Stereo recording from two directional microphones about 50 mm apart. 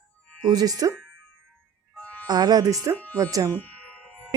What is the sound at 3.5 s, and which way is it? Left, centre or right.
Music, left.